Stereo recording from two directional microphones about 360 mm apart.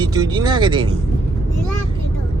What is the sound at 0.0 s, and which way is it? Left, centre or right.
Speech, centre.